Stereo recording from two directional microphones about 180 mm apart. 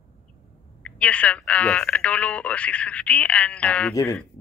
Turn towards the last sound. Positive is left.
turn(degrees=15)  # may be behind; listen again after turning